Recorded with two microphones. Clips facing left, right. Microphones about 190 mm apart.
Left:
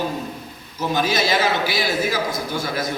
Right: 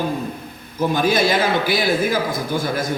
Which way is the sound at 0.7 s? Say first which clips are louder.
Right 3 dB; 55° right (ahead or behind).